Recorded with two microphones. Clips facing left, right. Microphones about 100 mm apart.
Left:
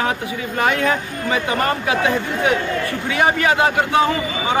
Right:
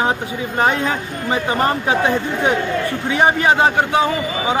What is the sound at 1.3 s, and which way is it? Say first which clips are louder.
Speech: right 2 dB; 30° right (ahead or behind).